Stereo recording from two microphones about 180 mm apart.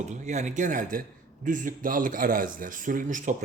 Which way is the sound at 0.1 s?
40° right (ahead or behind).